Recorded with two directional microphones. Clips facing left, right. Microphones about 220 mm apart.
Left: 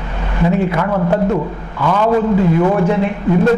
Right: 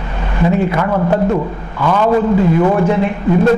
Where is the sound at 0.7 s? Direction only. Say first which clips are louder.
Right 1 dB; 20° right (ahead or behind).